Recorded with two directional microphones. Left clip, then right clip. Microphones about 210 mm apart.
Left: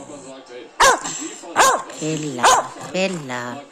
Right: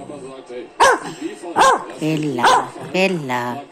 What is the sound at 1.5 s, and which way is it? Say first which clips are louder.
Dog: right 2 dB; 30° left (ahead or behind).